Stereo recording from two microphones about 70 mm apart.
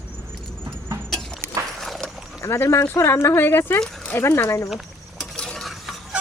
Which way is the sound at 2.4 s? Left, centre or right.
Left.